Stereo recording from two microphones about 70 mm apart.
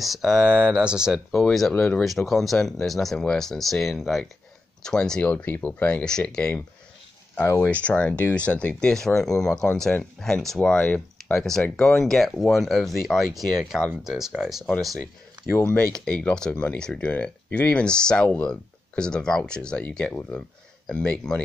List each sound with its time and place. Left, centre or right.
0.0 s speech: centre
0.5 s speech: centre
1.3 s speech: centre
1.7 s speech: centre
2.0 s speech: centre
5.3 s speech: left
7.4 s speech: left
7.8 s speech: centre
15.9 s speech: centre
20.2 s speech: left
20.8 s speech: centre